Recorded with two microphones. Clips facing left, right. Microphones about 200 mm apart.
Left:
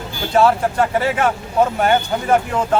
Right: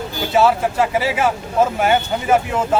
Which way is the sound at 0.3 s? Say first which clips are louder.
Left 1 dB; centre (ahead or behind).